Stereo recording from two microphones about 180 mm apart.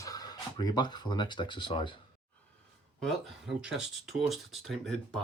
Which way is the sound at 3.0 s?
Centre (ahead or behind).